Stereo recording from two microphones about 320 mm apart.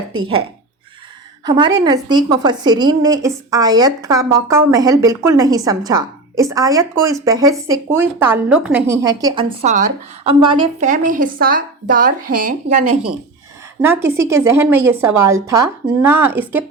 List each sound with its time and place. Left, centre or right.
1.5 s a woman's voice: centre
13.8 s a woman's voice: centre